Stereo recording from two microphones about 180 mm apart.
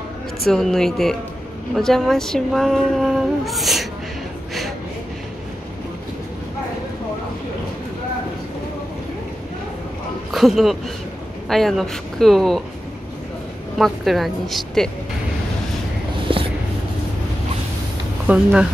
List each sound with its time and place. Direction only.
0.5 s speech: centre (ahead or behind)
10.3 s speech: centre (ahead or behind)
13.7 s speech: centre (ahead or behind)
16.3 s a sound: 30° right (ahead or behind)
18.2 s speech: 5° right (ahead or behind)